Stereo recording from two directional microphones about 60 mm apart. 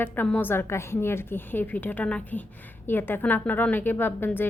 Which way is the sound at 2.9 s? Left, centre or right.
Left.